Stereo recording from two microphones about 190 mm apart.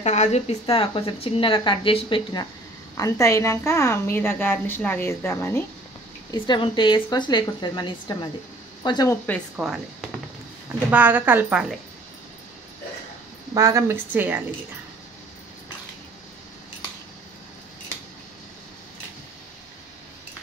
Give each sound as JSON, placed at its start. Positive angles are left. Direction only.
{"t": 0.0, "sound": "speech", "side_deg": 35}
{"t": 3.0, "sound": "a woman's voice", "side_deg": 15}
{"t": 6.3, "sound": "speech", "side_deg": 25}
{"t": 9.6, "sound": "a woman's voice", "side_deg": -5}
{"t": 13.6, "sound": "a woman's voice", "side_deg": -15}